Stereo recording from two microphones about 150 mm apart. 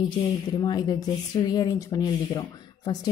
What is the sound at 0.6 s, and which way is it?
Speech, 30° left (ahead or behind).